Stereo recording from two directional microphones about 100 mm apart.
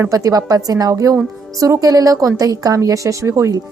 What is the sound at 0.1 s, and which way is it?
A woman's voice, 35° right (ahead or behind).